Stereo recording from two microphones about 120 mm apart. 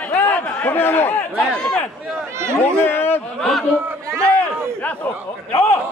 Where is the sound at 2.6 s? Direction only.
20° left (ahead or behind).